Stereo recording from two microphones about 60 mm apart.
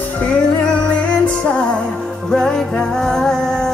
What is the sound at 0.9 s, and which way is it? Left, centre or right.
Music, left.